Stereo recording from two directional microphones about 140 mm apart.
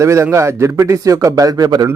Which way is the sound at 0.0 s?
20° right (ahead or behind).